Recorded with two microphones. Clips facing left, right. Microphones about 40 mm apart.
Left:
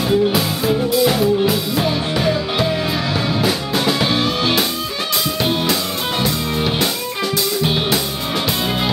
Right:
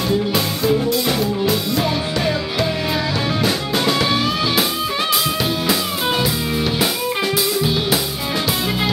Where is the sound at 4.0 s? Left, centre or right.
Centre.